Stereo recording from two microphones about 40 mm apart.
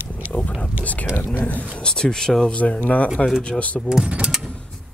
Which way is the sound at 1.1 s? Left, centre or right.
Left.